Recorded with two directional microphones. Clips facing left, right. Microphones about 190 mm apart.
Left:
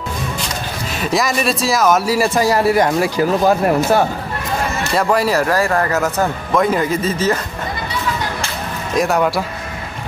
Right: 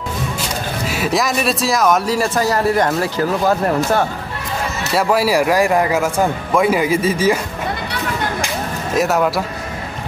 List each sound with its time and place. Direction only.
0.8 s speech: 5° right (ahead or behind); by 4.0 s 10° left (ahead or behind)
4.9 s speech: 5° right (ahead or behind)
8.9 s speech: centre (ahead or behind)